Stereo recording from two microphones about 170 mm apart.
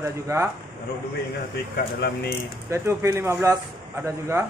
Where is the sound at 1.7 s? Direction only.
70° left (ahead or behind).